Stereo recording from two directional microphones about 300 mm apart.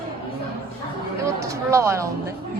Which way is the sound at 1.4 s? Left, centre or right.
Centre.